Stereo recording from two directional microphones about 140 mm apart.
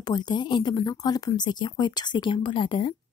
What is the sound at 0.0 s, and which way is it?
A woman's voice, 30° left (ahead or behind).